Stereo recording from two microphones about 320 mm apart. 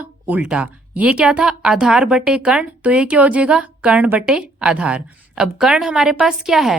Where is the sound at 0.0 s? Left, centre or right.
Centre.